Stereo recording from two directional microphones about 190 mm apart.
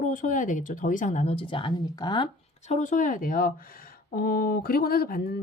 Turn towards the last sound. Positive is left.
turn(degrees=55)  # may be behind; listen again after turning